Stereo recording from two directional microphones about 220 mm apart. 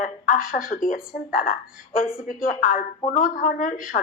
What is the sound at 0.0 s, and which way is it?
A woman's voice, 40° left (ahead or behind).